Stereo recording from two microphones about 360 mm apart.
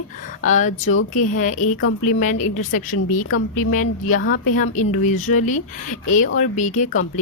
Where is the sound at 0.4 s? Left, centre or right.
Left.